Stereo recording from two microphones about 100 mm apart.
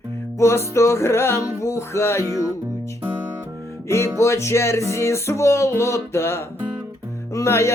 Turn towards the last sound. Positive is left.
turn(degrees=25)  # may be behind; listen again after turning